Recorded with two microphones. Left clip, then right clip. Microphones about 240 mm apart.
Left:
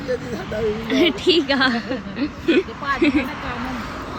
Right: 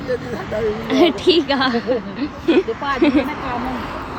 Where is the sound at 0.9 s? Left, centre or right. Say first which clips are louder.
Right 3 dB; centre.